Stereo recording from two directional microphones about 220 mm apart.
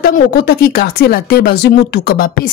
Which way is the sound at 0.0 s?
45° left (ahead or behind).